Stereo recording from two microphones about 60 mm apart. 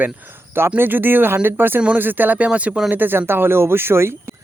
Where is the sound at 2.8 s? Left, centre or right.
Right.